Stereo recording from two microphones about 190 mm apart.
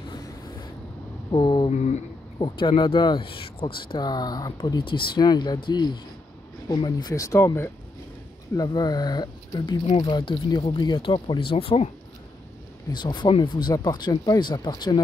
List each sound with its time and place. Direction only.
1.3 s speech: 25° left (ahead or behind)
1.7 s speech: 35° left (ahead or behind)
2.3 s speech: 25° left (ahead or behind)
12.9 s speech: 25° left (ahead or behind)